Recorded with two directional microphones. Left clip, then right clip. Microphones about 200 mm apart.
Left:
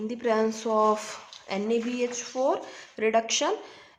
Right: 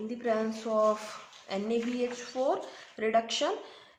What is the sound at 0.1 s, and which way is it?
Speech, 40° left (ahead or behind).